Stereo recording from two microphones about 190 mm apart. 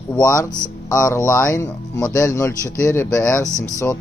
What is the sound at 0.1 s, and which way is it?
Speech, 15° left (ahead or behind).